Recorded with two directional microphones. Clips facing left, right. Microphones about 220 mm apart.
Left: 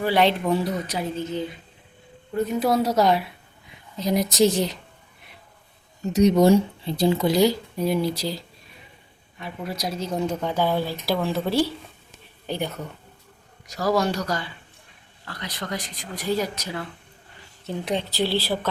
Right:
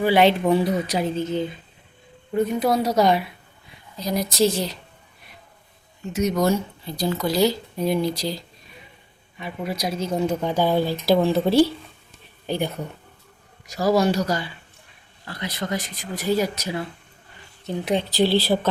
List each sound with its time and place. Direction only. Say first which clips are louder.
0.0 s speech: right 3 dB; 5° right (ahead or behind)
2.3 s speech: right 1 dB; centre (ahead or behind)
3.9 s speech: left 2 dB; 20° left (ahead or behind)
6.0 s speech: left 5 dB; 40° left (ahead or behind)
6.4 s speech: left 5 dB; 25° left (ahead or behind); by 10.3 s centre (ahead or behind)
10.4 s speech: right 3 dB; 15° right (ahead or behind)
17.9 s speech: right 5 dB; 15° right (ahead or behind)